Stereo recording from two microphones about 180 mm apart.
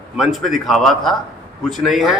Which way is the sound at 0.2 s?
Centre (ahead or behind).